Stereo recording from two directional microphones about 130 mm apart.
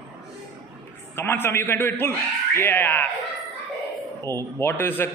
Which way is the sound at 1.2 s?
15° left (ahead or behind).